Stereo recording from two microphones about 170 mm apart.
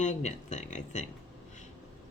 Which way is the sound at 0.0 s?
45° left (ahead or behind).